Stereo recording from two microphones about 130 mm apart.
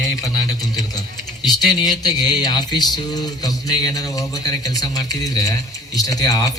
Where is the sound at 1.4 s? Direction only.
30° left (ahead or behind).